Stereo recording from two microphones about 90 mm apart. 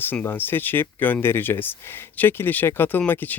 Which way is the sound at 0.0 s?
20° left (ahead or behind).